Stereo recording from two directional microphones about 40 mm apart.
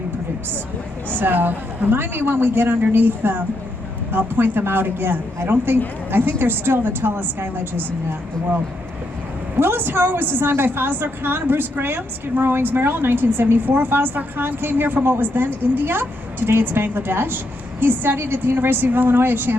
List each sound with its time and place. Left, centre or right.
1.2 s a woman's voice: right
9.6 s a woman's voice: right